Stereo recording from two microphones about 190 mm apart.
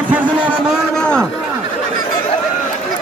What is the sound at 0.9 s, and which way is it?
Speech, 5° left (ahead or behind).